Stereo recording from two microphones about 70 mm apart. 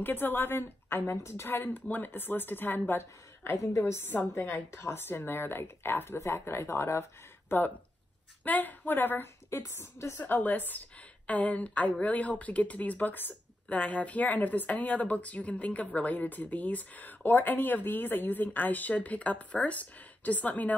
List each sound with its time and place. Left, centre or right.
0.0 s a woman's voice: left
3.5 s speech: left
4.1 s a woman's voice: left
4.6 s speech: left
8.5 s a woman's voice: left
9.5 s speech: left
10.2 s a woman's voice: left